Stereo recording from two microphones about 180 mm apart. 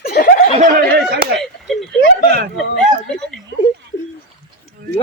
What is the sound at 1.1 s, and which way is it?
Speech, 65° right (ahead or behind).